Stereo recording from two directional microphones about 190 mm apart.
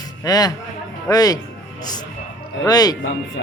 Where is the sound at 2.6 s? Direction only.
20° left (ahead or behind).